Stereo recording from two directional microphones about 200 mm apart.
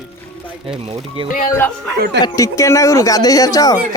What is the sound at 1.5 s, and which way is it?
Speech, 10° left (ahead or behind).